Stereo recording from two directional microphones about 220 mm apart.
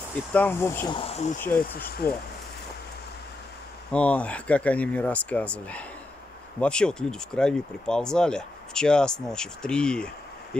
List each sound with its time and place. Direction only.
0.3 s speech: 10° left (ahead or behind)
0.9 s speech: 25° left (ahead or behind)
1.4 s speech: 10° left (ahead or behind)
3.9 s speech: 5° left (ahead or behind)